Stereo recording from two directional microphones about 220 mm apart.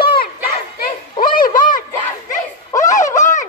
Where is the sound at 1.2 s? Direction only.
40° left (ahead or behind).